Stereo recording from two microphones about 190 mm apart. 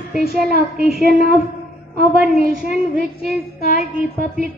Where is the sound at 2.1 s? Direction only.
5° right (ahead or behind).